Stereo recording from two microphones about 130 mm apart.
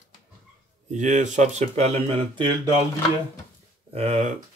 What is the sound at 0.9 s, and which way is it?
Speech, 70° right (ahead or behind).